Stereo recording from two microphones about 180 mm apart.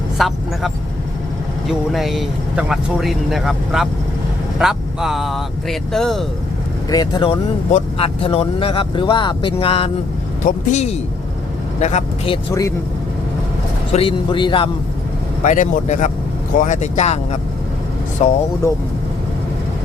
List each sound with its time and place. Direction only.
0.2 s speech: centre (ahead or behind)
6.9 s speech: 25° left (ahead or behind)
13.9 s speech: 30° left (ahead or behind)
15.4 s speech: 45° left (ahead or behind)
18.2 s speech: 40° left (ahead or behind)